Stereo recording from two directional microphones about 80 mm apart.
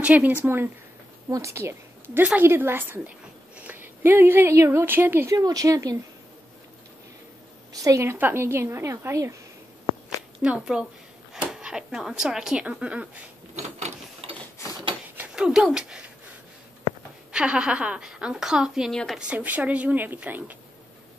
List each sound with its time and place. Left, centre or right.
0.0 s speech: centre
1.3 s a woman's voice: right
3.5 s a sound: right
4.6 s speech: right
5.3 s speech: right
7.7 s speech: right
8.2 s a woman's voice: right
10.0 s a sound: centre
11.3 s a woman's voice: centre
15.3 s speech: centre
17.3 s a woman's voice: centre
18.9 s a woman's voice: centre
19.1 s speech: centre